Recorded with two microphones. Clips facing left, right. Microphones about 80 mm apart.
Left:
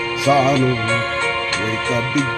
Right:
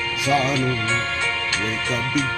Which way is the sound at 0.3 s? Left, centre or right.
Centre.